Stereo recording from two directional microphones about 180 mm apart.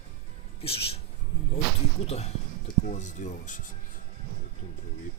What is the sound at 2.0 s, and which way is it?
Speech, 35° left (ahead or behind).